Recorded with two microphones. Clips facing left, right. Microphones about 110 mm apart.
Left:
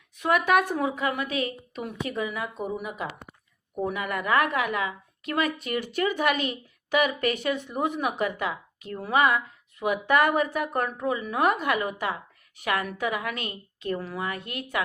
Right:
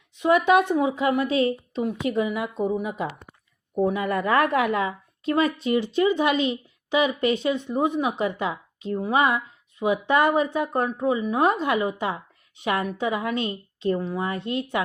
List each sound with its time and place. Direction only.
0.2 s a woman's voice: 25° right (ahead or behind)